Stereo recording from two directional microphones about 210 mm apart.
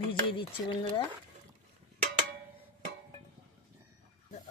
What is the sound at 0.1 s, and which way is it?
Speech, 25° left (ahead or behind).